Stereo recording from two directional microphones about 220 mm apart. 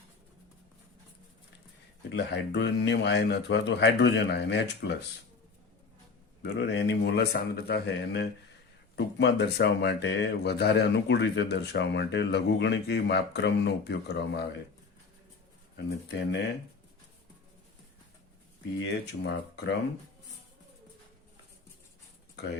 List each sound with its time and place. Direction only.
2.1 s speech: 50° left (ahead or behind)
6.4 s speech: 50° left (ahead or behind)
16.1 s speech: 50° left (ahead or behind)
18.8 s speech: 55° left (ahead or behind)